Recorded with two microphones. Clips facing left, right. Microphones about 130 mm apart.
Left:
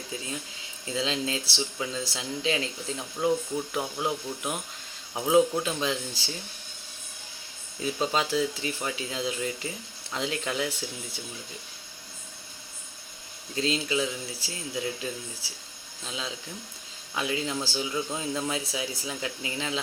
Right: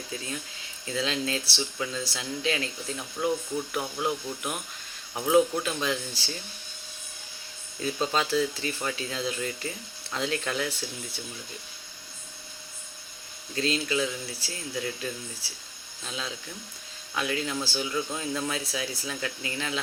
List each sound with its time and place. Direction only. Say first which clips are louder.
0.1 s speech: even; 20° left (ahead or behind)
7.8 s speech: even; 15° left (ahead or behind)
13.6 s speech: even; 20° left (ahead or behind)